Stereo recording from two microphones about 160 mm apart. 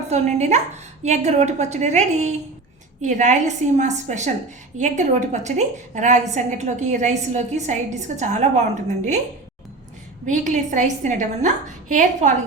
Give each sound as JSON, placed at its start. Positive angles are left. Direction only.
{"t": 0.1, "sound": "a woman's voice", "side_deg": -45}
{"t": 10.2, "sound": "a woman's voice", "side_deg": -50}